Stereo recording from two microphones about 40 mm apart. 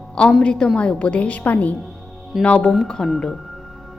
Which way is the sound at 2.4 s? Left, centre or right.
Left.